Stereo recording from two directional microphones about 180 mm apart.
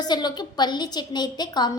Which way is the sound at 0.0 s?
25° left (ahead or behind).